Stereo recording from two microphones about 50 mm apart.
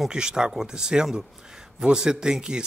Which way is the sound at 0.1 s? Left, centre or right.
Centre.